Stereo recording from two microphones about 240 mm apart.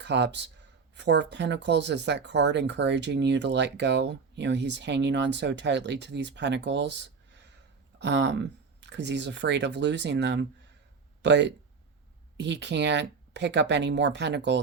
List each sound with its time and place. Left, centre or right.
0.0 s speech: right